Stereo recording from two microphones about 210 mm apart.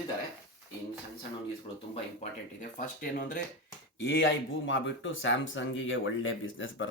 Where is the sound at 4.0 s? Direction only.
55° left (ahead or behind).